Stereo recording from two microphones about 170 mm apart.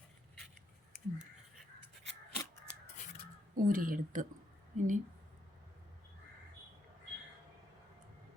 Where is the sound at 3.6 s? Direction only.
55° right (ahead or behind).